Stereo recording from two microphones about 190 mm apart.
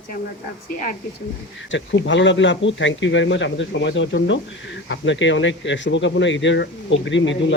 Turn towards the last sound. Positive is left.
turn(degrees=75)  # may be behind; listen again after turning